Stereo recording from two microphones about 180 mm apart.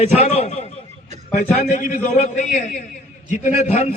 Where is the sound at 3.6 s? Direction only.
35° left (ahead or behind).